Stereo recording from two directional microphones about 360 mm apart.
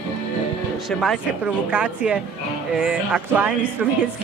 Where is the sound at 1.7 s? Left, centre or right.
Centre.